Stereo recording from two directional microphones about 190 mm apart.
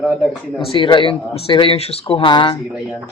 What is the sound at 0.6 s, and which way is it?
Speech, 30° left (ahead or behind).